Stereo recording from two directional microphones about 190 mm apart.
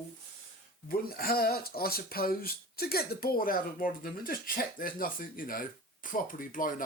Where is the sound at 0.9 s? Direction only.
50° left (ahead or behind).